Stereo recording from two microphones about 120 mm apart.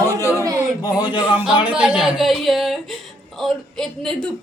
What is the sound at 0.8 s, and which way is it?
Speech, 35° left (ahead or behind).